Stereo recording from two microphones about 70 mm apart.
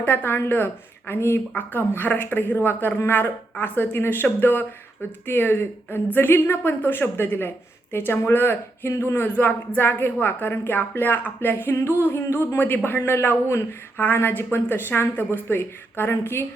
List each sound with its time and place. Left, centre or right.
0.0 s a woman's voice: left
9.2 s a woman's voice: left